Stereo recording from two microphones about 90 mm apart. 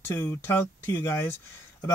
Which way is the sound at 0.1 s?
25° left (ahead or behind).